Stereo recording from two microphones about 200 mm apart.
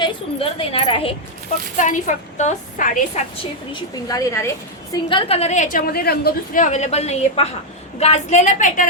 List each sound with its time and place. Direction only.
0.0 s a woman's voice: 25° left (ahead or behind)
1.7 s a woman's voice: 40° left (ahead or behind)
3.7 s a woman's voice: 20° left (ahead or behind)
5.0 s a woman's voice: 25° left (ahead or behind)